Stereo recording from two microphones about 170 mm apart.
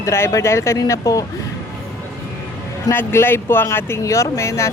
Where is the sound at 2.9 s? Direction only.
15° left (ahead or behind).